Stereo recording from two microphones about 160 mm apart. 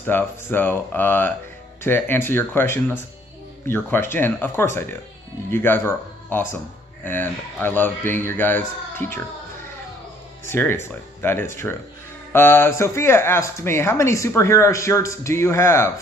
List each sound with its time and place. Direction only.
0.0 s speech: 15° left (ahead or behind)
10.5 s speech: 15° left (ahead or behind)